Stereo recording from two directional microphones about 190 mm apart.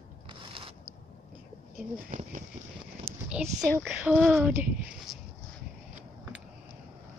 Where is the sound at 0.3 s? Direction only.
25° right (ahead or behind).